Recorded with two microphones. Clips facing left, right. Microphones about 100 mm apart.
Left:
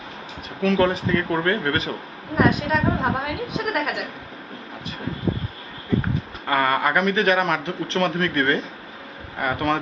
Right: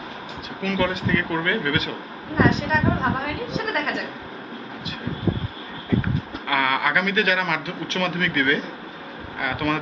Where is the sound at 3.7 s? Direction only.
10° left (ahead or behind).